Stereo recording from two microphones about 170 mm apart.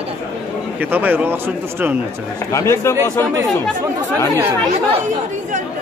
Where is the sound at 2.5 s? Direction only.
15° left (ahead or behind).